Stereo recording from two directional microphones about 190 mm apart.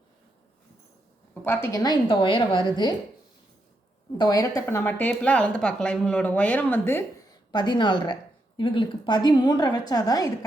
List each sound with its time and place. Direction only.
1.3 s a woman's voice: 10° left (ahead or behind)
4.2 s a woman's voice: 20° left (ahead or behind)
7.5 s a woman's voice: 25° left (ahead or behind)